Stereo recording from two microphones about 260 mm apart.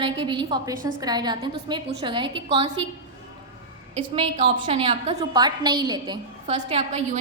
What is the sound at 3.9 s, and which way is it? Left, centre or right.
A woman's voice, right.